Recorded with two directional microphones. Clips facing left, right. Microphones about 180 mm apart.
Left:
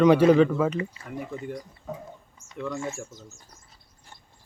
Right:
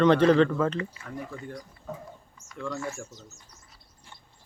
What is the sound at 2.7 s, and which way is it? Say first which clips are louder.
Speech: left 1 dB; 25° left (ahead or behind).